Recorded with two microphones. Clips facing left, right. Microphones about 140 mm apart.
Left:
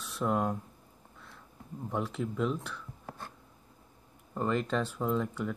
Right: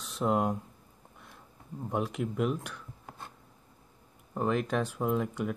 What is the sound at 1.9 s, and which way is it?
Speech, 15° right (ahead or behind).